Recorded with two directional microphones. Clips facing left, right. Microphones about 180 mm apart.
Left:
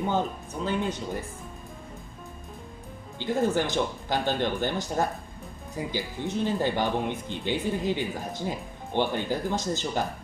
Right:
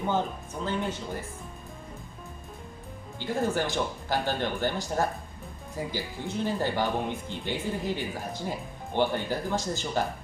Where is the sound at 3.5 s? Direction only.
20° left (ahead or behind).